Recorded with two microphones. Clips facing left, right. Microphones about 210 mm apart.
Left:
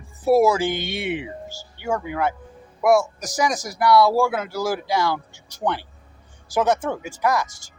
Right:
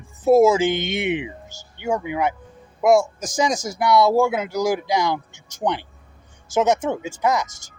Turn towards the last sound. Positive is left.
turn(degrees=-20)  # may be behind; listen again after turning